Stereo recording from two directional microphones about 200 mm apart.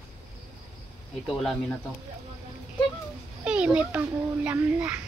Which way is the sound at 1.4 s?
Centre (ahead or behind).